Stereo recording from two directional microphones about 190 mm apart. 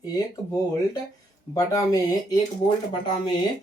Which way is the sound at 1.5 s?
20° left (ahead or behind).